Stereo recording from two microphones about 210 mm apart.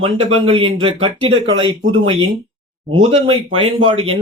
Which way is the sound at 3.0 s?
25° right (ahead or behind).